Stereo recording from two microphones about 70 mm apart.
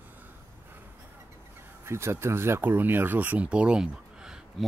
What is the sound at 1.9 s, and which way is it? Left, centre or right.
Speech, right.